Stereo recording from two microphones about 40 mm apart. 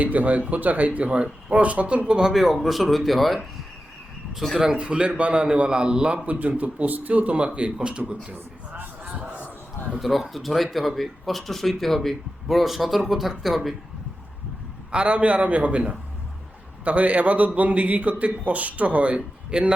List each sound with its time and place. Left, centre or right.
0.0 s a man's voice: right
2.3 s speech: centre
4.5 s speech: centre
4.8 s a man's voice: right
6.2 s a man's voice: right
9.0 s a sound: right
10.0 s speech: centre
14.8 s a man's voice: right